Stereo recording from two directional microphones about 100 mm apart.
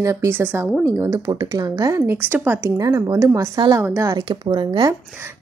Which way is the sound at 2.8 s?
35° right (ahead or behind).